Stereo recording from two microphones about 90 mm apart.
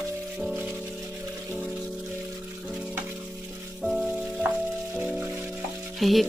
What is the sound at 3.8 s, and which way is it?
Music, 5° right (ahead or behind).